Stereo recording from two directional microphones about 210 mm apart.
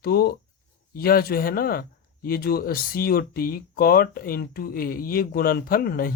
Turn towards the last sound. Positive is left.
turn(degrees=45)  # may be behind; listen again after turning